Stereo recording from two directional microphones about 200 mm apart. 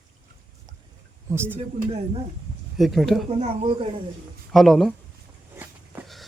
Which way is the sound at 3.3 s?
30° right (ahead or behind).